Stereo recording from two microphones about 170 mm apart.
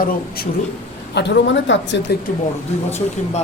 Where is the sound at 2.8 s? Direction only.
40° left (ahead or behind).